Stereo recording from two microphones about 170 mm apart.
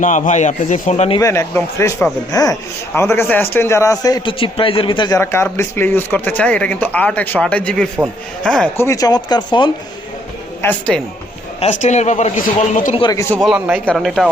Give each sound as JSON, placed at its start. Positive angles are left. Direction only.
{"t": 0.0, "sound": "a man's voice", "side_deg": 50}
{"t": 1.2, "sound": "speech", "side_deg": 15}
{"t": 8.8, "sound": "speech", "side_deg": 20}
{"t": 10.6, "sound": "speech", "side_deg": 10}
{"t": 11.6, "sound": "a man's voice", "side_deg": 45}
{"t": 13.0, "sound": "speech", "side_deg": 20}
{"t": 13.4, "sound": "speech", "side_deg": 0}